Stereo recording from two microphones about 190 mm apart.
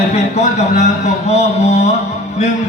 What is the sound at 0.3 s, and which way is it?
Speech, 35° left (ahead or behind).